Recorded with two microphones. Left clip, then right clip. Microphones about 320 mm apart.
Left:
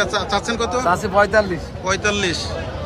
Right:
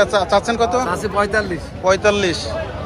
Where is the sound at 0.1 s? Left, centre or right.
Centre.